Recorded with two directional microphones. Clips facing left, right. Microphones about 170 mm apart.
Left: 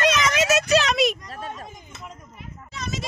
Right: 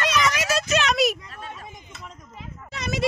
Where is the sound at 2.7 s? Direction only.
65° right (ahead or behind).